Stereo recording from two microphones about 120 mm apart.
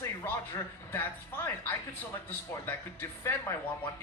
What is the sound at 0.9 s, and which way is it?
A woman's voice, 15° left (ahead or behind).